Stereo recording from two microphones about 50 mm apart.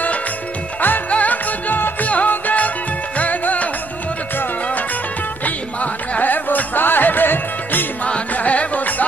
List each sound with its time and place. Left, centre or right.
0.7 s music: left
5.4 s music: left
8.0 s music: left